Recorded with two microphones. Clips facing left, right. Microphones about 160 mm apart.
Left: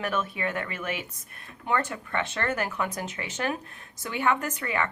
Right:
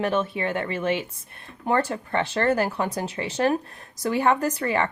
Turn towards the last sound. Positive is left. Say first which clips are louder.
# right 6 dB
turn(degrees=-35)  # may be behind; listen again after turning